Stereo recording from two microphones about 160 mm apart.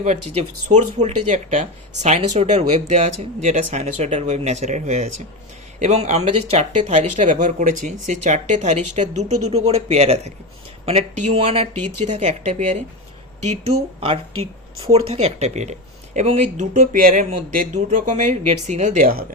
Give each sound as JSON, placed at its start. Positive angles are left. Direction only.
{"t": 0.0, "sound": "speech", "side_deg": -45}